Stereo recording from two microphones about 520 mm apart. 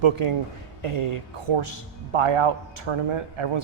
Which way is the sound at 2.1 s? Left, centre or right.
Right.